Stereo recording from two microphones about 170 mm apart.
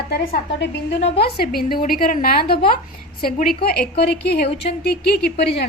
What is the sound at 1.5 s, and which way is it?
A woman's voice, 60° left (ahead or behind).